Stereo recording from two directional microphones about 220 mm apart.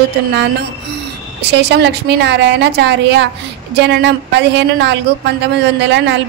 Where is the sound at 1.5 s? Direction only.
50° right (ahead or behind).